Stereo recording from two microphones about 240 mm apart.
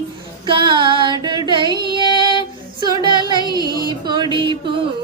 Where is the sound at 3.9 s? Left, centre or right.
Centre.